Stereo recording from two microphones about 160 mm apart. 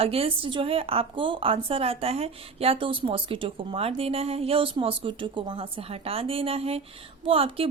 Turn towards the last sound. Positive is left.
turn(degrees=-35)  # may be behind; listen again after turning